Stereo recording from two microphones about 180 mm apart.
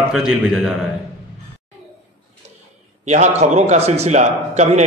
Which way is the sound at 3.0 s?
40° right (ahead or behind).